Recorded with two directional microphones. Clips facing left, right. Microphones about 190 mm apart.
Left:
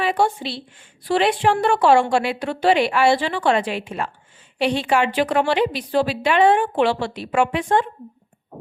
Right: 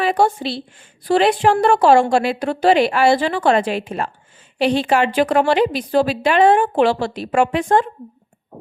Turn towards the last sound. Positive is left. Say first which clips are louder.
# right 3 dB
turn(degrees=-40)  # may be behind; listen again after turning